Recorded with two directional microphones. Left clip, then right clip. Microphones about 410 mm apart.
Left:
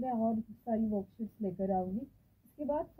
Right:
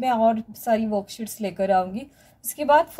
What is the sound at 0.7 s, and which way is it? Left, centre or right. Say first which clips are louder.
A woman's voice: right 14 dB; right.